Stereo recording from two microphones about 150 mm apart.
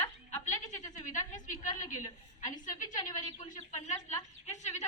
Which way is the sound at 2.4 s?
55° left (ahead or behind).